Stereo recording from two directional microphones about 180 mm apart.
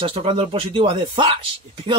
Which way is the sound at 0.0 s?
30° right (ahead or behind).